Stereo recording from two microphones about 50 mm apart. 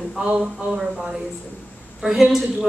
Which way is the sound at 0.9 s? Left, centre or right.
Centre.